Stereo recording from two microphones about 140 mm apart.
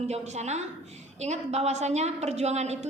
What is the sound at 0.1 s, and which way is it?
A woman's voice, 55° right (ahead or behind).